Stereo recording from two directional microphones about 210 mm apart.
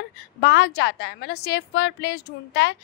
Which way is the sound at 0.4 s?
55° left (ahead or behind).